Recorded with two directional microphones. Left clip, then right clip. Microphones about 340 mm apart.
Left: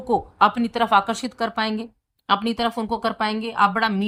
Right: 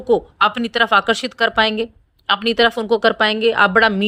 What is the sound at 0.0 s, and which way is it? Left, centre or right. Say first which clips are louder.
A woman's voice: right 3 dB; centre.